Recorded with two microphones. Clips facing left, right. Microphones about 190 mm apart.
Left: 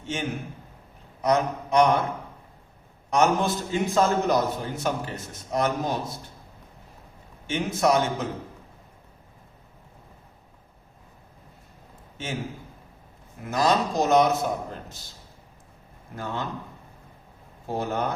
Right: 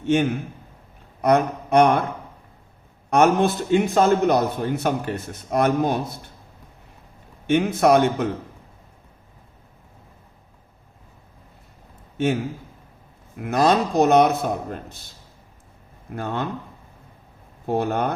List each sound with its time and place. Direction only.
0.0 s a man's voice: 60° right (ahead or behind)
3.1 s a man's voice: 60° right (ahead or behind)
7.4 s a man's voice: 60° right (ahead or behind)
12.1 s a man's voice: 60° right (ahead or behind)
13.4 s a man's voice: 60° right (ahead or behind)
16.1 s a man's voice: 55° right (ahead or behind)
17.7 s a man's voice: 60° right (ahead or behind)